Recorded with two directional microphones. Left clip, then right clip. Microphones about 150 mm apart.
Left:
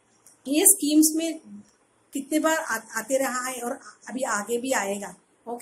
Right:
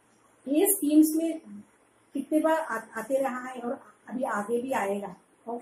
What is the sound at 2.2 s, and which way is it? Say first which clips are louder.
Speech: left 1 dB; 20° left (ahead or behind).